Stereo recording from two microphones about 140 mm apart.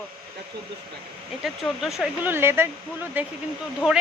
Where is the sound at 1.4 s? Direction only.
Centre (ahead or behind).